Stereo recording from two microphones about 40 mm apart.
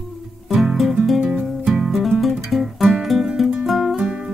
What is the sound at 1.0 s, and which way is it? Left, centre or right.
Music, centre.